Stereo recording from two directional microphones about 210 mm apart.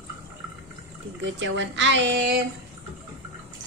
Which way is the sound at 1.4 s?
60° right (ahead or behind).